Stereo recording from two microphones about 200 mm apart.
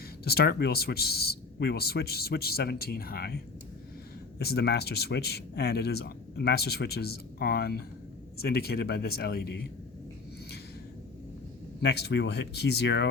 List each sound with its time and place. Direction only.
0.3 s speech: 50° left (ahead or behind)
11.8 s speech: 55° left (ahead or behind)